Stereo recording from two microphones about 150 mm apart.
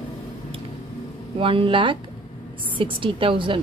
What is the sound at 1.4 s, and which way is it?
A woman's voice, 35° right (ahead or behind).